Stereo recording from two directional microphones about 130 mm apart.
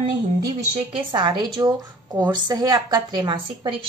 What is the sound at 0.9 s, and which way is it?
A woman's voice, 35° right (ahead or behind).